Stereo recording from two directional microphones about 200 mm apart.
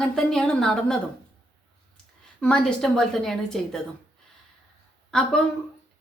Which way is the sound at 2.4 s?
5° left (ahead or behind).